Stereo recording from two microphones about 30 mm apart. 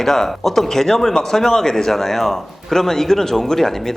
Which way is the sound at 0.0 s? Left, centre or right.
Centre.